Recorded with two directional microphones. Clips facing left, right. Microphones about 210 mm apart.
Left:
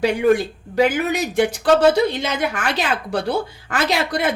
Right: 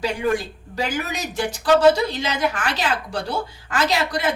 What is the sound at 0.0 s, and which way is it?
Speech, 60° left (ahead or behind).